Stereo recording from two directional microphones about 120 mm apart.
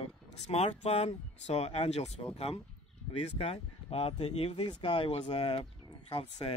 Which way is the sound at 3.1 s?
55° left (ahead or behind).